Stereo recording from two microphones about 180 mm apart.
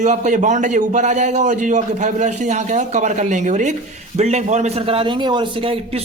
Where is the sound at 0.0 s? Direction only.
40° right (ahead or behind).